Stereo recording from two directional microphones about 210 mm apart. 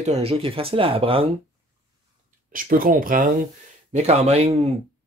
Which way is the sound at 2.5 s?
40° right (ahead or behind).